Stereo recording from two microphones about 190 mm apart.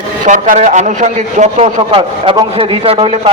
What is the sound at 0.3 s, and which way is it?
A man's voice, 40° right (ahead or behind).